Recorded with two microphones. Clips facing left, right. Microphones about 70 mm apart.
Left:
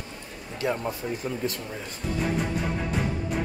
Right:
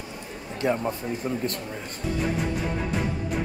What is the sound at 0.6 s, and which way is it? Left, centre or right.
Speech, right.